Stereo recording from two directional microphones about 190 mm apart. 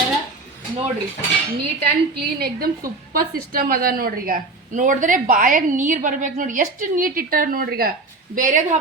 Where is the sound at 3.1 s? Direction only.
50° right (ahead or behind).